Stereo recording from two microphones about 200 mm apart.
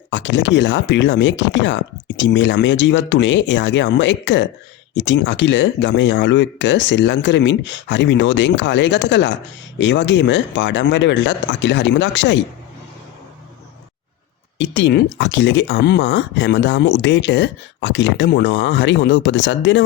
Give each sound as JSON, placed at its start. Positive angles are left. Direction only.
{"t": 0.1, "sound": "speech", "side_deg": 65}
{"t": 14.6, "sound": "speech", "side_deg": 60}